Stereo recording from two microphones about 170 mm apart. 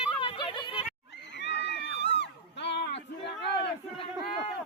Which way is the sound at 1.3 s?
90° left.